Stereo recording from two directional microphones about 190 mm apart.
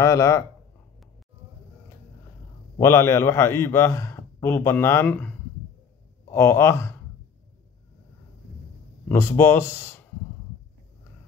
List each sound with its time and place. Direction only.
0.0 s a man's voice: 15° left (ahead or behind)
2.8 s a man's voice: 15° left (ahead or behind)
6.3 s a man's voice: 15° left (ahead or behind)
9.1 s a man's voice: 10° left (ahead or behind)